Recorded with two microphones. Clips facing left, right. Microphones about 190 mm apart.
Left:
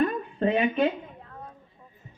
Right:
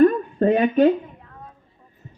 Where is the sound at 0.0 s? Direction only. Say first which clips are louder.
Right 9 dB; 45° right (ahead or behind).